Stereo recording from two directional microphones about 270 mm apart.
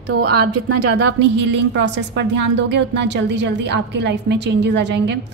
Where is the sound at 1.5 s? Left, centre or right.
Right.